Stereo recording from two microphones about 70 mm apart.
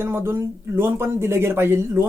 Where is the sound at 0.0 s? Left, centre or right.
Right.